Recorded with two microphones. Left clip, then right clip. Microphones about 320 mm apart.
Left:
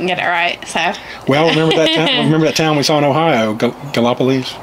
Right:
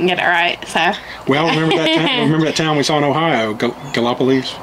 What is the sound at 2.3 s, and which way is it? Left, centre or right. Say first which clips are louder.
Speech: left 2 dB; left.